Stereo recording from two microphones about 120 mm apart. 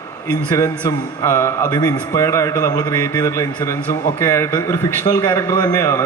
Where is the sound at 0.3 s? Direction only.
25° left (ahead or behind).